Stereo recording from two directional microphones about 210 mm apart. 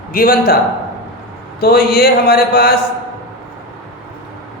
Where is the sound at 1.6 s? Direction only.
50° left (ahead or behind).